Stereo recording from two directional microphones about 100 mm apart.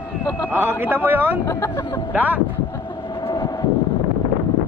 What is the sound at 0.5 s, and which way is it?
A man's voice, 20° right (ahead or behind).